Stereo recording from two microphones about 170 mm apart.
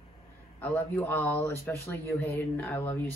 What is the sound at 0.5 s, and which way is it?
Speech, 10° left (ahead or behind).